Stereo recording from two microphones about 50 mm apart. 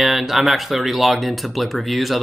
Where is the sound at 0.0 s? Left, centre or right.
Centre.